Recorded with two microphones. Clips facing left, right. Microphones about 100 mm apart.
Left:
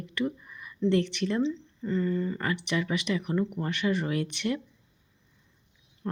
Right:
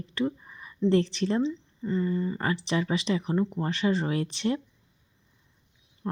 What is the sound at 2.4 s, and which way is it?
Speech, 30° right (ahead or behind).